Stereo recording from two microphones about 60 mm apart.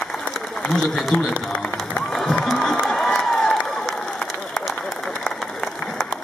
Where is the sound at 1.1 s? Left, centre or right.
Left.